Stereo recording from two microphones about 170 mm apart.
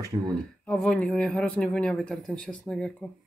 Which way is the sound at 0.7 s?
5° left (ahead or behind).